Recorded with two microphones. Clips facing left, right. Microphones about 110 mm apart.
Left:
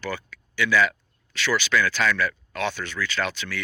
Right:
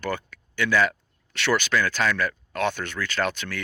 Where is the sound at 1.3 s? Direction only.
60° right (ahead or behind).